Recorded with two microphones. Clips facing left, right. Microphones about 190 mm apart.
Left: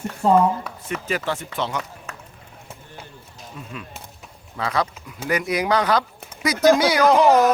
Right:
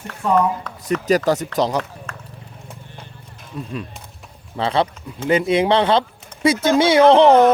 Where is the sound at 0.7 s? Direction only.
10° left (ahead or behind).